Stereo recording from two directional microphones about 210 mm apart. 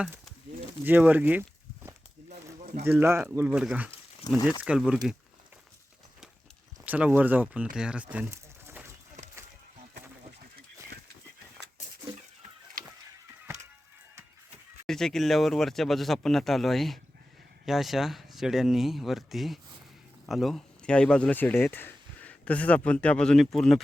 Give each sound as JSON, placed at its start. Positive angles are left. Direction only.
{"t": 0.0, "sound": "a sound", "side_deg": -5}
{"t": 2.3, "sound": "a sound", "side_deg": -30}
{"t": 2.8, "sound": "speech", "side_deg": -10}
{"t": 4.4, "sound": "speech", "side_deg": 20}
{"t": 4.6, "sound": "speech", "side_deg": -5}
{"t": 6.8, "sound": "speech", "side_deg": -10}
{"t": 14.8, "sound": "speech", "side_deg": 0}